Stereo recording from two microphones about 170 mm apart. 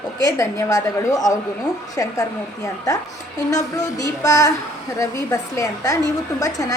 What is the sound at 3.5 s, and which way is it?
A woman's voice, 20° left (ahead or behind).